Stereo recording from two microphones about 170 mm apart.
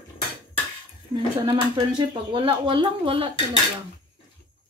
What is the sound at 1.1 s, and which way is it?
Speech, 25° right (ahead or behind).